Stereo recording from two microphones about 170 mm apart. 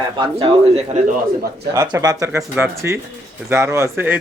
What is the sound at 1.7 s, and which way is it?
Speech, 20° right (ahead or behind).